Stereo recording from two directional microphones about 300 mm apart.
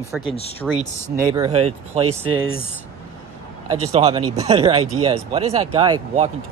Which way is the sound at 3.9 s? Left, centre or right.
Centre.